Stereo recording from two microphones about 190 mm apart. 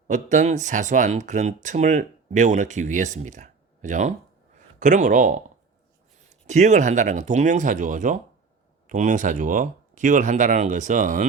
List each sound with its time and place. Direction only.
0.1 s speech: 40° right (ahead or behind)
6.5 s speech: 40° right (ahead or behind)